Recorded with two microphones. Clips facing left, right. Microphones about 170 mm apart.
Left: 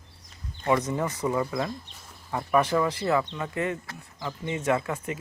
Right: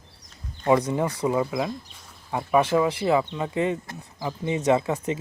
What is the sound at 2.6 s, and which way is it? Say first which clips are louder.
Speech: right 3 dB; 25° right (ahead or behind).